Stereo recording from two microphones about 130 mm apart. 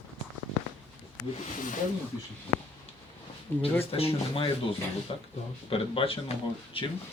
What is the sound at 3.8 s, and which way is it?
Speech, 50° left (ahead or behind).